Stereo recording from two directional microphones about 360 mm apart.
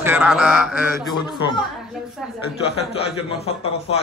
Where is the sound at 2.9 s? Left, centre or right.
Centre.